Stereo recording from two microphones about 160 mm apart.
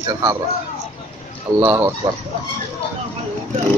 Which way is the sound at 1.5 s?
15° right (ahead or behind).